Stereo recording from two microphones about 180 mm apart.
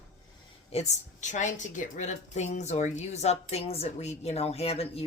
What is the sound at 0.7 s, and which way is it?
A woman's voice, 40° left (ahead or behind).